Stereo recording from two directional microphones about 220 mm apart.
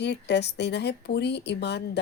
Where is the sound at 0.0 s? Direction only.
50° left (ahead or behind).